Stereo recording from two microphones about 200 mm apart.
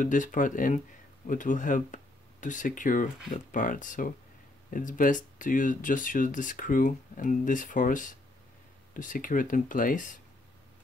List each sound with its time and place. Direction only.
0.0 s speech: 40° left (ahead or behind)